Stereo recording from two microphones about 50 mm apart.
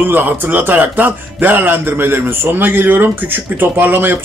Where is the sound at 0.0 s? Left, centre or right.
Right.